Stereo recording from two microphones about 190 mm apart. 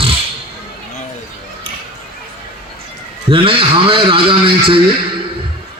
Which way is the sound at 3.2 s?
30° right (ahead or behind).